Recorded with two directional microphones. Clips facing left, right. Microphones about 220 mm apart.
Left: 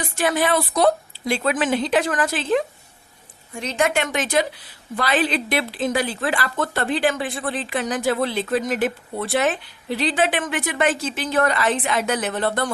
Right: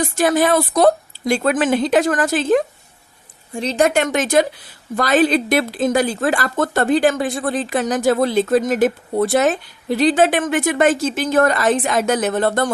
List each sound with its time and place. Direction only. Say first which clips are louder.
0.0 s speech: right 5 dB; 40° right (ahead or behind)
3.5 s speech: right 5 dB; 30° right (ahead or behind)